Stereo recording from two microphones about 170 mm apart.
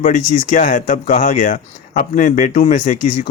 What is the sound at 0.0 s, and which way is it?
Speech, 45° left (ahead or behind).